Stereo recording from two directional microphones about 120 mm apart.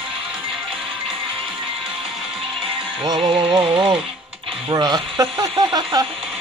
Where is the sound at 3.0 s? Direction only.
35° right (ahead or behind).